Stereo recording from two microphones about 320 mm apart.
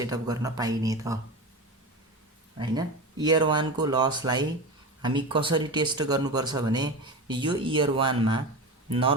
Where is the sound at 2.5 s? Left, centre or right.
Centre.